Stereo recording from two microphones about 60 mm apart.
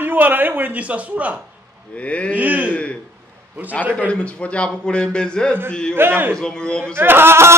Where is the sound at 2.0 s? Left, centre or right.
Left.